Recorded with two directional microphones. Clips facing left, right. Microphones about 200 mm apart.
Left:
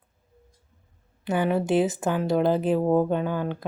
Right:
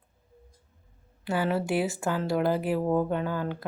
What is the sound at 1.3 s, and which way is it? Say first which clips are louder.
Speech: left 4 dB; 20° left (ahead or behind).